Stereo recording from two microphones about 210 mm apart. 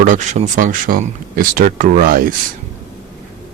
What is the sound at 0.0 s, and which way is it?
Speech, 35° right (ahead or behind).